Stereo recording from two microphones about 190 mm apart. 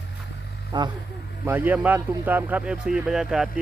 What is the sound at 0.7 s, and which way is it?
Speech, 25° right (ahead or behind).